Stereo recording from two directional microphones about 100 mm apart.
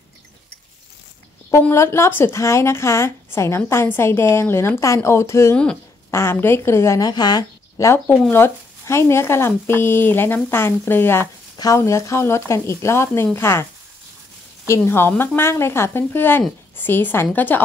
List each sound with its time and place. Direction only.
1.7 s a woman's voice: 25° left (ahead or behind)
7.0 s speech: 45° left (ahead or behind)
8.3 s a woman's voice: 25° left (ahead or behind)
14.7 s a woman's voice: 25° left (ahead or behind)